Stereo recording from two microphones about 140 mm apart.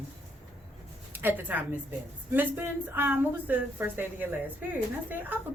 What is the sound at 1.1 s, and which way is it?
Speech, 15° right (ahead or behind).